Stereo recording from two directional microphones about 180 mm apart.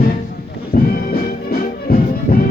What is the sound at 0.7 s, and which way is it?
Music, 55° left (ahead or behind).